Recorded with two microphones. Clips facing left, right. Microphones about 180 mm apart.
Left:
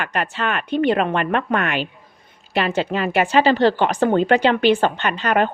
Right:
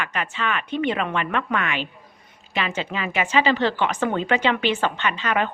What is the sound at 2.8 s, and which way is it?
Speech, 50° left (ahead or behind).